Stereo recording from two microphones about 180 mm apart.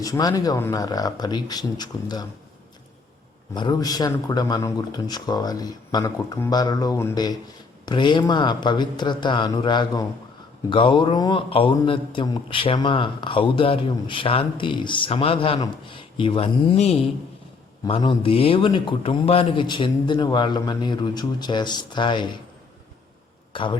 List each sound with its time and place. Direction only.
0.0 s a man's voice: 20° left (ahead or behind)
3.5 s a man's voice: 25° left (ahead or behind)
23.5 s speech: 25° left (ahead or behind)